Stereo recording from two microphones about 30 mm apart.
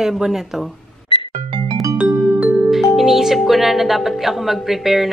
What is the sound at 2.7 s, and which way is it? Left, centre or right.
A woman's voice, centre.